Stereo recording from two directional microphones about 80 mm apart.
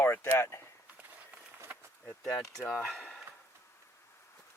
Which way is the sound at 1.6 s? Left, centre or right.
Right.